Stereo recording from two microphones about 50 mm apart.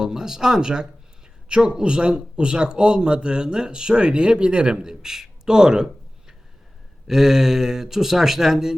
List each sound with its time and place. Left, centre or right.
0.0 s speech: centre